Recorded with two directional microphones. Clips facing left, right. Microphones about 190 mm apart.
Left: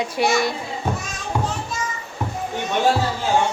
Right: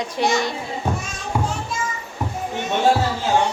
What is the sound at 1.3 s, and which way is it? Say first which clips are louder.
Children playing: right 1 dB; 5° right (ahead or behind).